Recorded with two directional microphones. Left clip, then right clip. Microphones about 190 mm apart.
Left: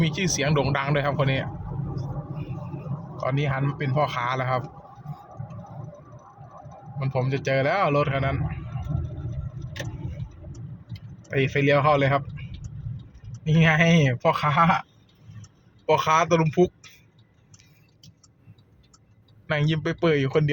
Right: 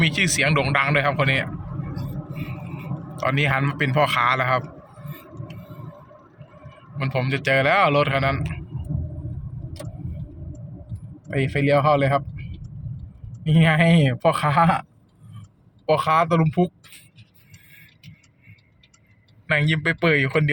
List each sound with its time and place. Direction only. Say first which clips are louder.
0.0 s a man's voice: right 6 dB; centre (ahead or behind)
3.2 s a man's voice: right 6 dB; centre (ahead or behind)
7.0 s a man's voice: right 3 dB; 5° left (ahead or behind)
11.3 s speech: right 1 dB; 10° right (ahead or behind)
13.4 s speech: right 1 dB; 15° right (ahead or behind)
15.9 s a man's voice: right 1 dB; 5° right (ahead or behind)
19.5 s a man's voice: right 5 dB; 5° left (ahead or behind)